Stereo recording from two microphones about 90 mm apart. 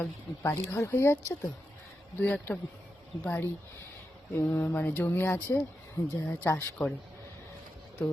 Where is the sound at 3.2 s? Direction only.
20° left (ahead or behind).